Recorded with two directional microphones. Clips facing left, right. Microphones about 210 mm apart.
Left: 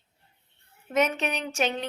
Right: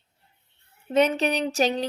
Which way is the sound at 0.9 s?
30° right (ahead or behind).